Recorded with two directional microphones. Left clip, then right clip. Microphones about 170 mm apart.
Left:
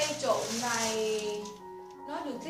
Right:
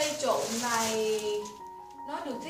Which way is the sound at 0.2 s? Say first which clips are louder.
Right 1 dB; 10° left (ahead or behind).